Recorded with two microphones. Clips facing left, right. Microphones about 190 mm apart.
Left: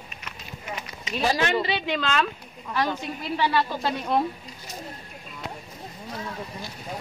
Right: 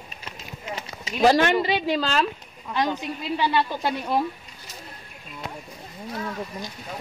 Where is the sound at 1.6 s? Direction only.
40° right (ahead or behind).